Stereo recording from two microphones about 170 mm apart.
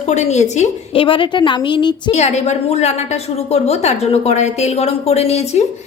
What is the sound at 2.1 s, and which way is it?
A woman's voice, 40° left (ahead or behind).